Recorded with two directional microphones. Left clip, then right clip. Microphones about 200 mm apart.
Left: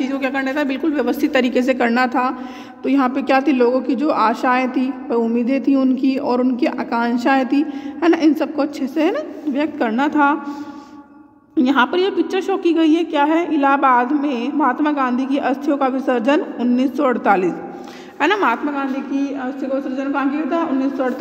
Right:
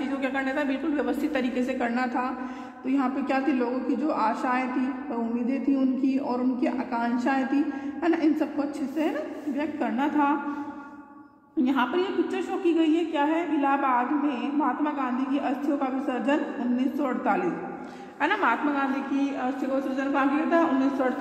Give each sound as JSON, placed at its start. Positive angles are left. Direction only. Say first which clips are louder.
{"t": 0.0, "sound": "a woman's voice", "louder": "left 8 dB", "side_deg": 45}
{"t": 11.5, "sound": "a woman's voice", "louder": "left 9 dB", "side_deg": 40}